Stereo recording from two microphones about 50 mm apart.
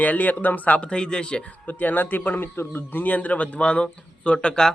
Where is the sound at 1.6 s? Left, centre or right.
Left.